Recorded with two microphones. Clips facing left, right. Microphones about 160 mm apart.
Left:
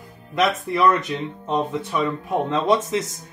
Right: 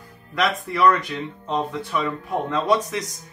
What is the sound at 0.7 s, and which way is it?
Speech, 25° left (ahead or behind).